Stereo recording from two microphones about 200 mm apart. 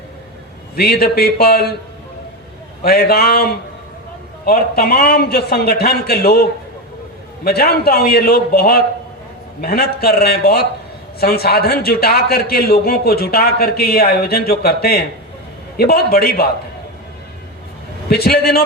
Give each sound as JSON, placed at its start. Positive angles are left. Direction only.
{"t": 0.8, "sound": "a man's voice", "side_deg": 50}
{"t": 2.8, "sound": "a man's voice", "side_deg": 50}
{"t": 18.1, "sound": "a man's voice", "side_deg": 50}